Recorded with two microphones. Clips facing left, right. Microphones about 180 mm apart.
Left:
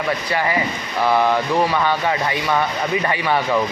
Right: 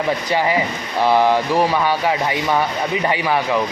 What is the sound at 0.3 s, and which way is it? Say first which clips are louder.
Speech: right 2 dB; 15° right (ahead or behind).